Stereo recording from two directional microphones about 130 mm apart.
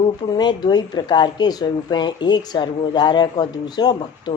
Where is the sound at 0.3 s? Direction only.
35° left (ahead or behind).